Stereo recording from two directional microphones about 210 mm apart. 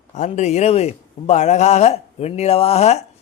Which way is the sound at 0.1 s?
35° left (ahead or behind).